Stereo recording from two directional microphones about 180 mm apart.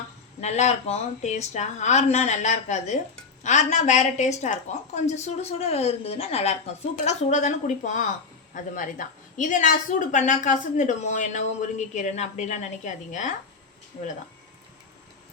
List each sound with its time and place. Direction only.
0.4 s a woman's voice: 40° left (ahead or behind)